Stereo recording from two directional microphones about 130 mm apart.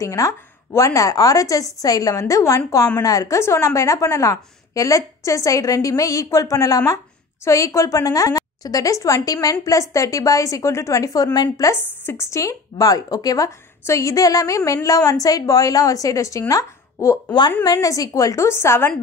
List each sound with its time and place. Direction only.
0.0 s a woman's voice: 25° left (ahead or behind)